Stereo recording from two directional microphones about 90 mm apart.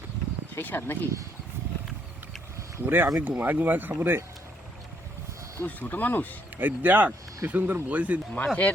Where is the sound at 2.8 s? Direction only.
20° right (ahead or behind).